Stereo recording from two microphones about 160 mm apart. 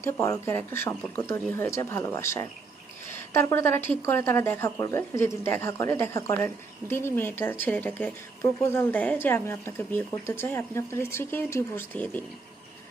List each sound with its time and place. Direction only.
0.0 s a woman's voice: 15° left (ahead or behind)